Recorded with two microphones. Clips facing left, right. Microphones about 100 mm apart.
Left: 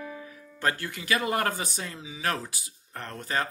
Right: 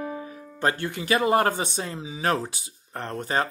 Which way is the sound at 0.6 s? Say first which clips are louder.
Right 4 dB; 25° right (ahead or behind).